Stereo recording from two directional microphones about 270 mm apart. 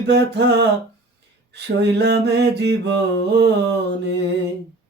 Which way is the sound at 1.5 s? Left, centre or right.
Right.